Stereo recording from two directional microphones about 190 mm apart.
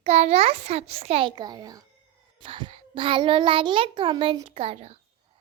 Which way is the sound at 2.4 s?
25° right (ahead or behind).